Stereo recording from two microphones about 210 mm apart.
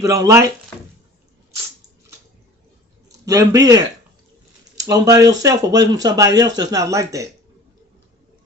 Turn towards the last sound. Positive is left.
turn(degrees=-15)  # may be behind; listen again after turning